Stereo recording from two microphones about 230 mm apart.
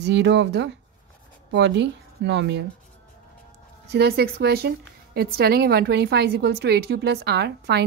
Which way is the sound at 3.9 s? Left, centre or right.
Right.